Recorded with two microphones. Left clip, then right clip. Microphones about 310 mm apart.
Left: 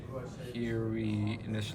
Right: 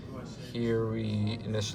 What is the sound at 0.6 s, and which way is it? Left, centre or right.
Speech, centre.